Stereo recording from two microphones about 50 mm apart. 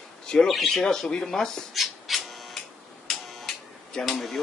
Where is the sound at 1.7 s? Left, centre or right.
Centre.